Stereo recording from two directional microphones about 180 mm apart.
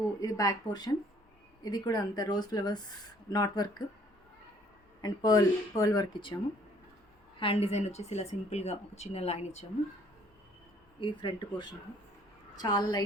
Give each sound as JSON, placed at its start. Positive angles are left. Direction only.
{"t": 0.2, "sound": "speech", "side_deg": 20}
{"t": 5.0, "sound": "speech", "side_deg": 20}
{"t": 7.3, "sound": "speech", "side_deg": 30}
{"t": 11.0, "sound": "speech", "side_deg": 25}